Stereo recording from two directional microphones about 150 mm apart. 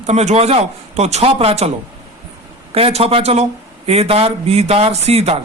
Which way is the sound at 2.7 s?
40° right (ahead or behind).